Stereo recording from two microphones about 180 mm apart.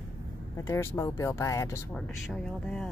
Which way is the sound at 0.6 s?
15° left (ahead or behind).